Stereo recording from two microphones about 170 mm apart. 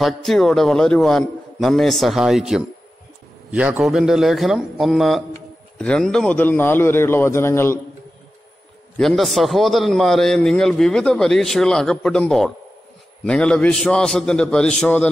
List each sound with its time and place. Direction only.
0.0 s a man's voice: centre (ahead or behind)
8.9 s a man's voice: centre (ahead or behind)